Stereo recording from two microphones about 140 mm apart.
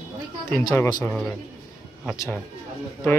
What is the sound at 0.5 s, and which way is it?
Speech, 10° left (ahead or behind).